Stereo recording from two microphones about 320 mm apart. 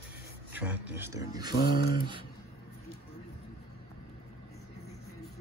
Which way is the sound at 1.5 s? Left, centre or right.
Left.